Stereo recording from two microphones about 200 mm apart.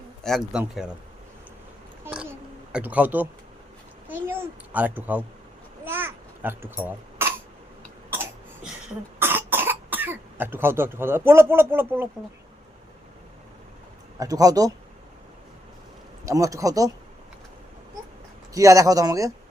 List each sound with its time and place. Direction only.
0.2 s speech: centre (ahead or behind)
2.7 s a child's voice: 10° right (ahead or behind)
5.8 s babbling: 10° right (ahead or behind)
9.1 s cough: 10° right (ahead or behind)
14.2 s speech: 15° right (ahead or behind)
16.2 s speech: 15° right (ahead or behind)
18.5 s speech: 15° right (ahead or behind)